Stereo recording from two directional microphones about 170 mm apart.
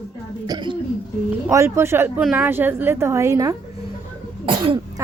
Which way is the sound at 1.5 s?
15° right (ahead or behind).